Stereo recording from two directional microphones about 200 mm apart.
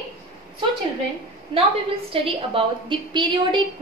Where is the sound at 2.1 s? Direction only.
25° right (ahead or behind).